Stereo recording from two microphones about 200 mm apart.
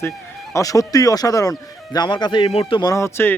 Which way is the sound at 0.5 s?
15° left (ahead or behind).